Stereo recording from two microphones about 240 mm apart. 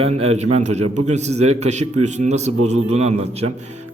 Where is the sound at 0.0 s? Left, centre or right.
Right.